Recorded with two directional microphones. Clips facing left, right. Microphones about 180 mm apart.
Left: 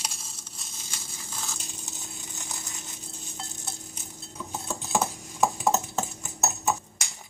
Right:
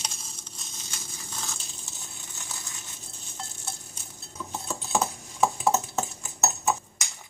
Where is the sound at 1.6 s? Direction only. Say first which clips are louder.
Left 4 dB; 15° left (ahead or behind).